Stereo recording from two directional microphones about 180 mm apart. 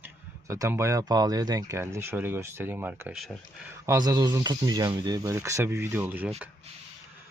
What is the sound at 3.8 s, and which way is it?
Speech, 15° right (ahead or behind).